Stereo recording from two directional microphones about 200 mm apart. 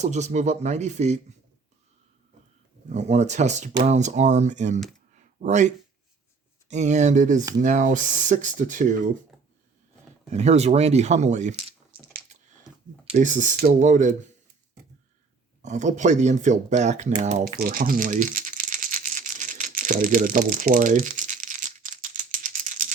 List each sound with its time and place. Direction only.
0.0 s speech: 35° right (ahead or behind)
2.9 s speech: 35° right (ahead or behind)
5.1 s a sound: 35° right (ahead or behind)
6.7 s speech: 35° right (ahead or behind)
10.2 s speech: 35° right (ahead or behind)
13.1 s speech: 40° right (ahead or behind)
15.6 s speech: 35° right (ahead or behind)
17.6 s crumpling: 45° right (ahead or behind)